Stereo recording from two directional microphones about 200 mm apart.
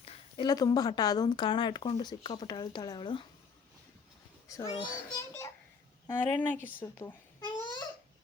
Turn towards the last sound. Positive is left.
turn(degrees=20)  # may be behind; listen again after turning